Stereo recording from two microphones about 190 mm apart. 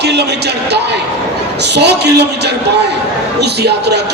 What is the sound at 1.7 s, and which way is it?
Speech, 60° right (ahead or behind).